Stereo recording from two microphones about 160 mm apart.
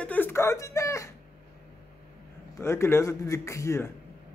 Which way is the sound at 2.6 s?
15° left (ahead or behind).